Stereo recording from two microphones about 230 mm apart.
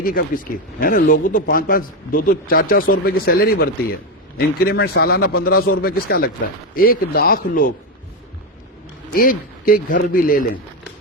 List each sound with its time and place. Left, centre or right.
0.0 s speech: left
9.1 s speech: left